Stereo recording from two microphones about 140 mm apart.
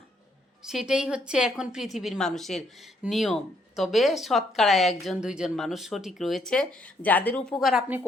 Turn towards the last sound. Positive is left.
turn(degrees=0)  # may be behind; listen again after turning